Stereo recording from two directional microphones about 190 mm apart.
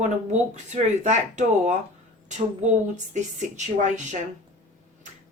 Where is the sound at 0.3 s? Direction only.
40° right (ahead or behind).